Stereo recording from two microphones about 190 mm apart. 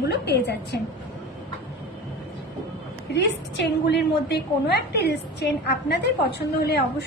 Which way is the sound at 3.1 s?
65° left (ahead or behind).